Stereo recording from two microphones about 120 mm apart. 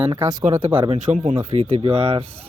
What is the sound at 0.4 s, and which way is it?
Speech, 70° right (ahead or behind).